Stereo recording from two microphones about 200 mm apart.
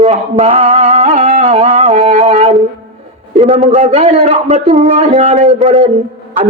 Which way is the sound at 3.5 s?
35° right (ahead or behind).